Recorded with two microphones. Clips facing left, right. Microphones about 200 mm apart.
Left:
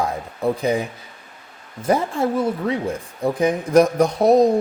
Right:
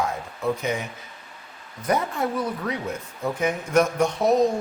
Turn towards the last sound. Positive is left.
turn(degrees=35)  # may be behind; listen again after turning